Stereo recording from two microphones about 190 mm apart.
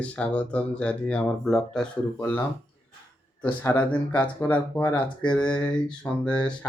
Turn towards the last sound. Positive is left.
turn(degrees=5)  # may be behind; listen again after turning